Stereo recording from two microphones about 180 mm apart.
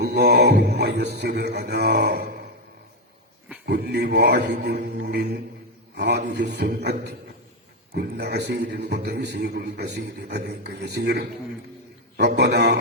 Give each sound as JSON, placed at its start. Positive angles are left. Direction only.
{"t": 0.0, "sound": "a man's voice", "side_deg": -65}
{"t": 3.7, "sound": "a man's voice", "side_deg": -65}
{"t": 4.9, "sound": "mantra", "side_deg": -70}
{"t": 5.9, "sound": "a man's voice", "side_deg": -70}
{"t": 7.9, "sound": "a man's voice", "side_deg": -70}